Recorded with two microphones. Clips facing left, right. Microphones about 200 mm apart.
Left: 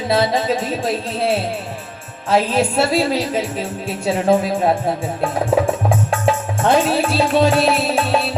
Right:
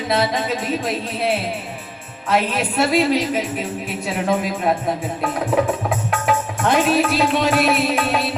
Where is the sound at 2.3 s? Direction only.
30° left (ahead or behind).